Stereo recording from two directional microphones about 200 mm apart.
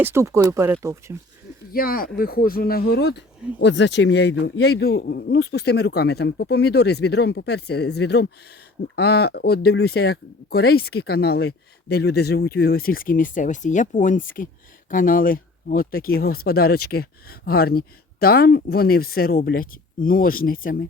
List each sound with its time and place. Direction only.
0.0 s speech: 15° right (ahead or behind)
1.7 s speech: 45° left (ahead or behind)